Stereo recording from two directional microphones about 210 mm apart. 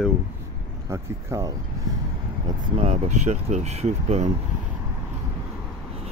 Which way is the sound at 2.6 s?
30° right (ahead or behind).